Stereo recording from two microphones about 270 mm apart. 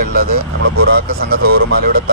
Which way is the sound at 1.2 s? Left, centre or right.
Right.